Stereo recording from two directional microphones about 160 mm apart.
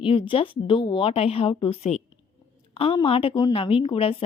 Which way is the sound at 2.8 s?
35° left (ahead or behind).